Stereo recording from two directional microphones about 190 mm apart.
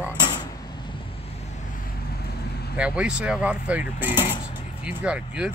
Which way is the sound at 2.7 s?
5° right (ahead or behind).